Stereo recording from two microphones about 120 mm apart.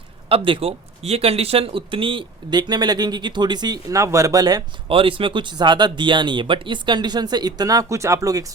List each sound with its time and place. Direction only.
0.3 s speech: 50° right (ahead or behind); by 4.6 s 30° right (ahead or behind)
4.9 s speech: 50° right (ahead or behind); by 8.4 s 30° right (ahead or behind)